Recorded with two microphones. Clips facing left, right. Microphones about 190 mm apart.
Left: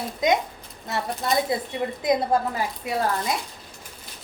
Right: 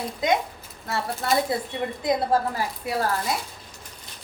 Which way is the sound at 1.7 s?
20° left (ahead or behind).